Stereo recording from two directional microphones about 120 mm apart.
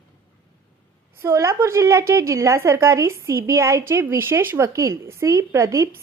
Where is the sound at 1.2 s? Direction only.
25° right (ahead or behind).